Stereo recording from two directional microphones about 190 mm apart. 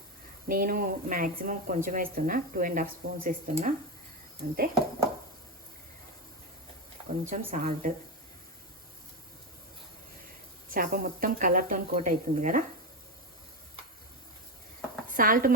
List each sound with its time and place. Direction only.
0.4 s speech: 50° right (ahead or behind)
7.3 s speech: 45° right (ahead or behind)
10.7 s speech: 50° right (ahead or behind)
15.1 s speech: 45° right (ahead or behind)